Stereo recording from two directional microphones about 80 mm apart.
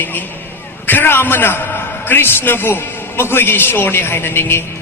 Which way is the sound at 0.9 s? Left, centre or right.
Left.